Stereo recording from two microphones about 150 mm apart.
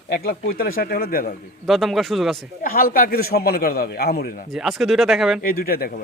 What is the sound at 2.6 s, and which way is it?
A man's voice, 75° left (ahead or behind).